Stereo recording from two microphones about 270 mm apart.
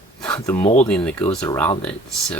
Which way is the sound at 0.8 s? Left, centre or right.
Centre.